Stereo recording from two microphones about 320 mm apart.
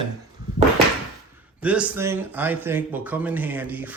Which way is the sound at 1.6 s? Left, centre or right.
Centre.